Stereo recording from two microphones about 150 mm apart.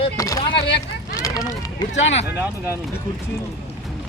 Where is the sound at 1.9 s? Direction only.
45° left (ahead or behind).